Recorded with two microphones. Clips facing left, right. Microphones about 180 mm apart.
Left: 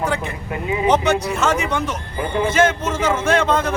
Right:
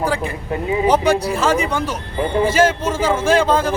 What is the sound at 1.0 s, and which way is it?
A man's voice, 30° right (ahead or behind).